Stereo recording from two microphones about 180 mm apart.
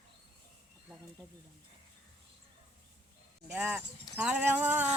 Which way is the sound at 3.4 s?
5° right (ahead or behind).